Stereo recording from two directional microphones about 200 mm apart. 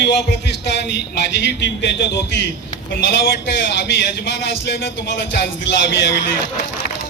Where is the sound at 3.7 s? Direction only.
60° left (ahead or behind).